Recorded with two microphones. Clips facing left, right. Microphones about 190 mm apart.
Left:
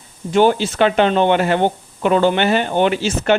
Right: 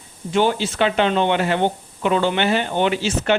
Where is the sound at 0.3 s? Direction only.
50° left (ahead or behind).